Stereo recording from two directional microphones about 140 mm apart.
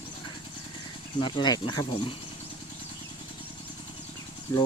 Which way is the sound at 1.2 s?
35° left (ahead or behind).